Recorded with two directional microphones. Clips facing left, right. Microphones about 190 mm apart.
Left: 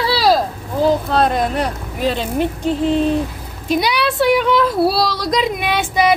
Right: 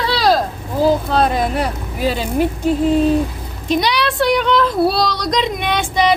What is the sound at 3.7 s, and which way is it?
Speech, 5° left (ahead or behind).